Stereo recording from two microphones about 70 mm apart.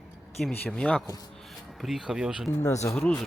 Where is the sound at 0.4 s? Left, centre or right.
Centre.